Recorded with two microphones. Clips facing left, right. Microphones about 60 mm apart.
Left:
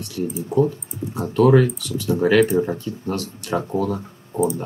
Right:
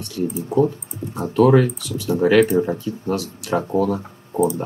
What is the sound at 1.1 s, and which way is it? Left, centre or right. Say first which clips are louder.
Speech: right 1 dB; centre.